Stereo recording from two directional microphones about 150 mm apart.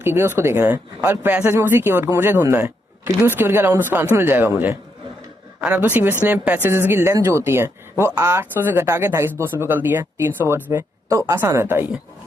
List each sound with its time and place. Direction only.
0.0 s speech: 15° right (ahead or behind)